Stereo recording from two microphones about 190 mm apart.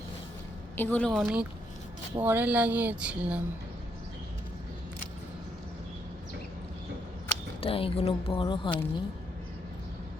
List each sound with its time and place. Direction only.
0.8 s a woman's voice: 10° left (ahead or behind)
7.6 s speech: 30° left (ahead or behind)